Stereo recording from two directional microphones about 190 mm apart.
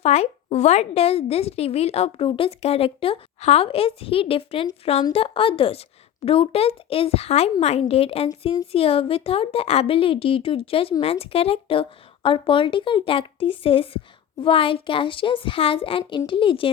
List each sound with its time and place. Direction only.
0.0 s a woman's voice: 35° left (ahead or behind)